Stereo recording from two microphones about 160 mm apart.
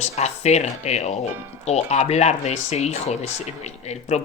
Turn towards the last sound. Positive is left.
turn(degrees=45)  # may be behind; listen again after turning